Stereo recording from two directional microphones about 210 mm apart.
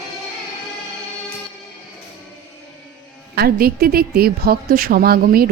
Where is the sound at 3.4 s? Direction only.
45° right (ahead or behind).